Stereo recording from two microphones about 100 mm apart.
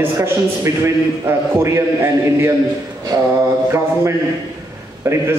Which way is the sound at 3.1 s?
45° right (ahead or behind).